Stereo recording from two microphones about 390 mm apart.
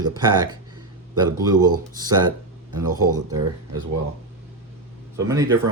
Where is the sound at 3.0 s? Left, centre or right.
Right.